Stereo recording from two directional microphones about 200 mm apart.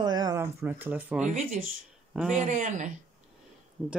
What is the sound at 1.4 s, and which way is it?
Speech, 40° right (ahead or behind).